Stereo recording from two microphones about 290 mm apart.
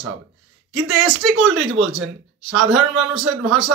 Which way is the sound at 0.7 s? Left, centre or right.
Centre.